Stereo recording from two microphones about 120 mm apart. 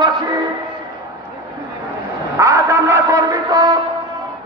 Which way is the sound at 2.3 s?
25° right (ahead or behind).